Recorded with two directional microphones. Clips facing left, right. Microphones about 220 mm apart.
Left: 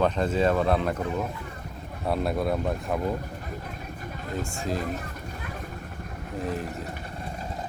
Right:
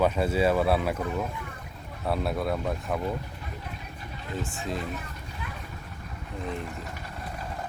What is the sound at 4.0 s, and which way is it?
Vehicle, 45° left (ahead or behind).